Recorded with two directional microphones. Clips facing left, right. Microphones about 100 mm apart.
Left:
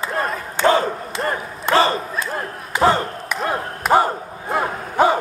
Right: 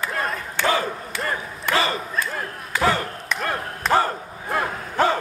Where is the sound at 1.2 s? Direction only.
35° left (ahead or behind).